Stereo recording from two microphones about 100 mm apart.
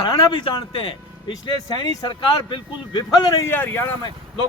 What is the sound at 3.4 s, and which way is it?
Speech, 20° left (ahead or behind).